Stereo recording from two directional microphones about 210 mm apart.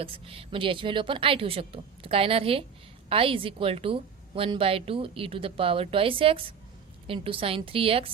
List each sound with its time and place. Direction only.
0.0 s a woman's voice: 25° right (ahead or behind)